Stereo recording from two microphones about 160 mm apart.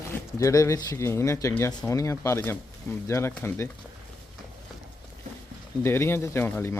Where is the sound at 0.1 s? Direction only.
20° left (ahead or behind).